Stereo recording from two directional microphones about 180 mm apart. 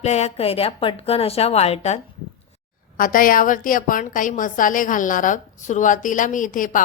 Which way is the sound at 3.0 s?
50° left (ahead or behind).